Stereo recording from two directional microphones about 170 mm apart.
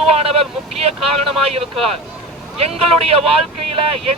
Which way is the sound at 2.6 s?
35° right (ahead or behind).